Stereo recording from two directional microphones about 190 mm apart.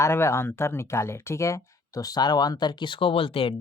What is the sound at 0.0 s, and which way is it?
Speech, 15° left (ahead or behind).